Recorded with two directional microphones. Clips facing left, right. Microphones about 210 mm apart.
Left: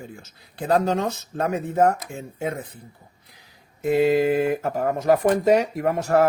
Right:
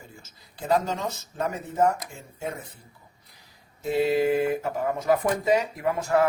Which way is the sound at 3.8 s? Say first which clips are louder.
Left 4 dB; 50° left (ahead or behind).